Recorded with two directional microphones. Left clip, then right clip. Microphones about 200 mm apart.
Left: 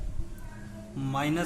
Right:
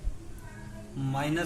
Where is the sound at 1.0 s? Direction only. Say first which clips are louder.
Left 1 dB; 25° left (ahead or behind).